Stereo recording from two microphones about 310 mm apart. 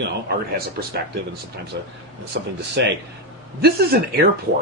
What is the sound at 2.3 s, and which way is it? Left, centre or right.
Speech, right.